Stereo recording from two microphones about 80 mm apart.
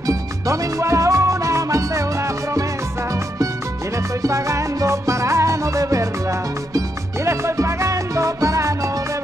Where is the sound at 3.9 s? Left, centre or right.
Right.